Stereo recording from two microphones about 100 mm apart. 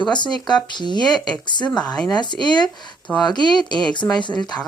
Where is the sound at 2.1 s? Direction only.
50° left (ahead or behind).